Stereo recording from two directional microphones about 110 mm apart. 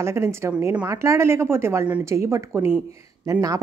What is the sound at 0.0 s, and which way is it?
Speech, 25° right (ahead or behind).